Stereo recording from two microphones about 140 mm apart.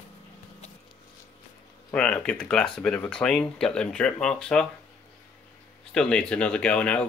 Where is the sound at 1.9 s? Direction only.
5° left (ahead or behind).